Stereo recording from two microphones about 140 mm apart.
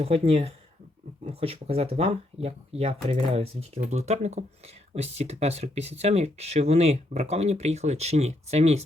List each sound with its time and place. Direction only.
0.0 s speech: 45° right (ahead or behind)